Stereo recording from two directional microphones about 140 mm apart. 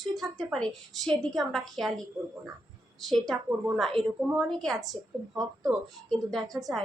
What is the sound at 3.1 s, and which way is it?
A woman's voice, centre (ahead or behind).